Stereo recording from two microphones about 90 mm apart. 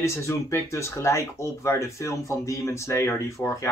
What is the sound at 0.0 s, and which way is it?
Speech, 35° left (ahead or behind).